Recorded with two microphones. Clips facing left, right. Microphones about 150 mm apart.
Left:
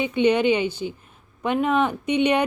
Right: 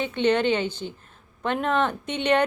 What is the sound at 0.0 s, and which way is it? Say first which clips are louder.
Speech: left 3 dB; 10° left (ahead or behind).